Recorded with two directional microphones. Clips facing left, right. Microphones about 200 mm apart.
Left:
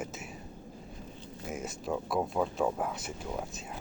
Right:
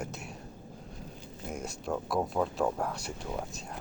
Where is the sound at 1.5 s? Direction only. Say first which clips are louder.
Even; centre (ahead or behind).